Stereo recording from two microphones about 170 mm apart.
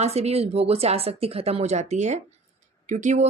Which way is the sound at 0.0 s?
40° right (ahead or behind).